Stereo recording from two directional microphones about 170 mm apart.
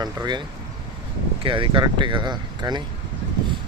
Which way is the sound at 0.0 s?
25° right (ahead or behind).